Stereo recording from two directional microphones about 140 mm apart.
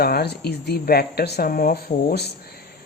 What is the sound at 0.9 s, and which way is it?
Speech, 90° left.